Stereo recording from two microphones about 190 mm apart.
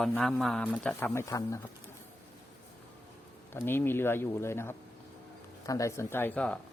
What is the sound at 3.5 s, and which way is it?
Speech, 10° left (ahead or behind).